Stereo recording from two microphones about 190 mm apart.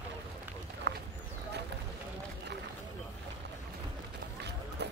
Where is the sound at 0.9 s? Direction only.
65° right (ahead or behind).